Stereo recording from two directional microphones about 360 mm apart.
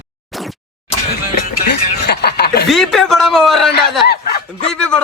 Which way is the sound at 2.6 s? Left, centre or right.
Centre.